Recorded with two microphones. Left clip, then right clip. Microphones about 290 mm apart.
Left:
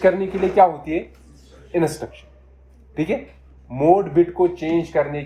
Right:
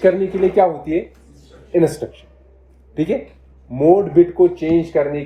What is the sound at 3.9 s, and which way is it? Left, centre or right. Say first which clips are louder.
Speech: right 4 dB; centre.